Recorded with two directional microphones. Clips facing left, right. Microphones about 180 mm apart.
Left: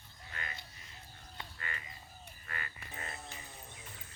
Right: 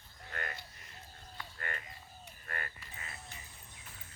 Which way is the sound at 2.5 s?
50° right (ahead or behind).